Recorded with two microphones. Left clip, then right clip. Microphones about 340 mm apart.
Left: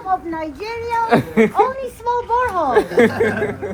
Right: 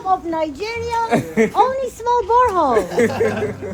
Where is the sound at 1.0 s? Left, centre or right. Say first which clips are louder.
Left 3 dB; centre.